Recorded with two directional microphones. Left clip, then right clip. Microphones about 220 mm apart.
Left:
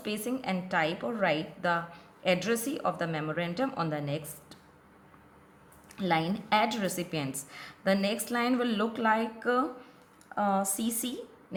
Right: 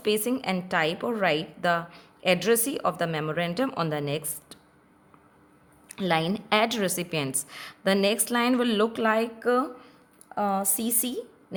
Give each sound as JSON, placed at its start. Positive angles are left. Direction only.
{"t": 0.0, "sound": "a woman's voice", "side_deg": -45}
{"t": 5.9, "sound": "a woman's voice", "side_deg": -45}